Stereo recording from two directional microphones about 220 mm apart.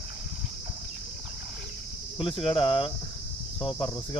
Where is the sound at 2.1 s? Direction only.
25° left (ahead or behind).